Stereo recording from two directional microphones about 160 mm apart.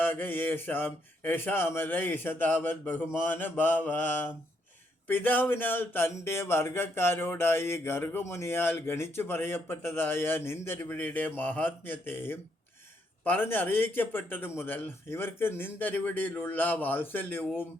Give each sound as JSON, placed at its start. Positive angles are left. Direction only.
{"t": 0.0, "sound": "speech", "side_deg": 10}